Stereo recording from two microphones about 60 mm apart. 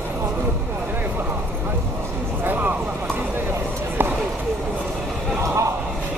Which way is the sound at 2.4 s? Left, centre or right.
Right.